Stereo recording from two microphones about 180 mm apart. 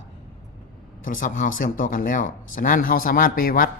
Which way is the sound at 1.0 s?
50° left (ahead or behind).